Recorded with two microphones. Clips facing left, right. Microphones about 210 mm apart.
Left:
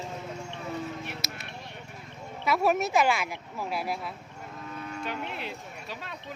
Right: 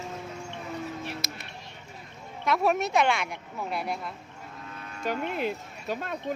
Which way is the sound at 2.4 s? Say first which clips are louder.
Even; 5° left (ahead or behind).